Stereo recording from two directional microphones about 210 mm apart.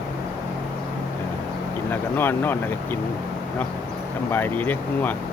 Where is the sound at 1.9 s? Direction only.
10° left (ahead or behind).